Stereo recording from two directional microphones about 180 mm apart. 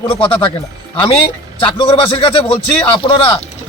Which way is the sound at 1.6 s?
30° left (ahead or behind).